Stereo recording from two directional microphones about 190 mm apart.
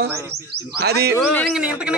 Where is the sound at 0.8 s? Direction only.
55° right (ahead or behind).